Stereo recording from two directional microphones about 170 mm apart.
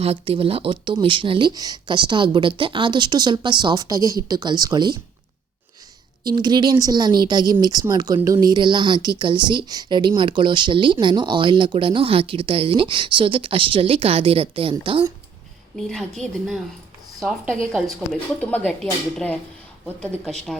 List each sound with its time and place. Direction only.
0.0 s speech: 35° right (ahead or behind)
6.2 s speech: 25° right (ahead or behind)
15.7 s speech: centre (ahead or behind)